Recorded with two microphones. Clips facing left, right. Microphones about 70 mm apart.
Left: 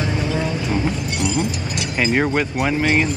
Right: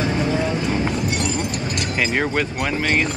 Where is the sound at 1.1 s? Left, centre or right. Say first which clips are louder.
Left 2 dB; right.